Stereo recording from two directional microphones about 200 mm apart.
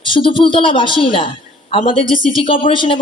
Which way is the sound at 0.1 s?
25° left (ahead or behind).